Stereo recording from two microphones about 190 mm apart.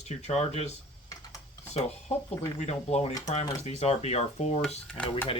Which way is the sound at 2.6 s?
35° left (ahead or behind).